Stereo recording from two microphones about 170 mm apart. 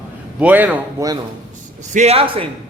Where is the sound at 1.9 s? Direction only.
35° right (ahead or behind).